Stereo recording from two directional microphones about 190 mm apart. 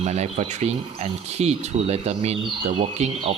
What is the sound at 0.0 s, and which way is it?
Speech, 35° right (ahead or behind).